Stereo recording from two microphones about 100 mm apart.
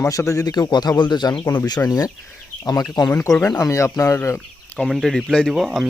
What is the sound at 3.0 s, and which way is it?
Speech, 10° left (ahead or behind).